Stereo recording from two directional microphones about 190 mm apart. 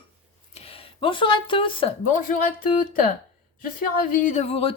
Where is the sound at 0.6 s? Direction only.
30° left (ahead or behind).